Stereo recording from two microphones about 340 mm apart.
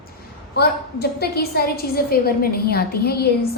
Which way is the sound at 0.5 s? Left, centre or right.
Left.